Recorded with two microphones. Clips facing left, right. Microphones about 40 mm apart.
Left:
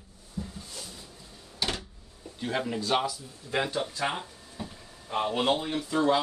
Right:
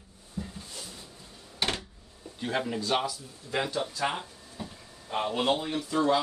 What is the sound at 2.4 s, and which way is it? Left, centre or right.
Speech, centre.